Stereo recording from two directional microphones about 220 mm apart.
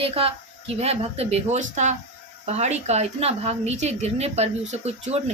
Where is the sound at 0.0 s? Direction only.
25° right (ahead or behind).